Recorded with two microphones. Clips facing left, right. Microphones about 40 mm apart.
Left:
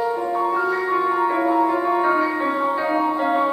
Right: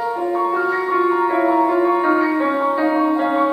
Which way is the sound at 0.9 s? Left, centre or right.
Centre.